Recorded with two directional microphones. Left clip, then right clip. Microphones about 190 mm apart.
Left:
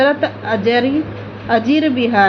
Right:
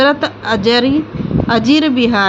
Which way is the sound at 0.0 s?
40° right (ahead or behind).